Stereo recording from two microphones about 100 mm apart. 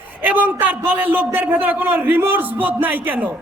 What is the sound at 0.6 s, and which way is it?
A man's voice, 15° right (ahead or behind).